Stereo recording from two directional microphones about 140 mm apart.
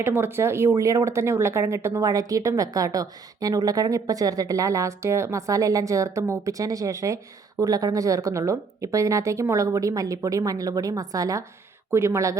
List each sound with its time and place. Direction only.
0.0 s speech: 15° right (ahead or behind)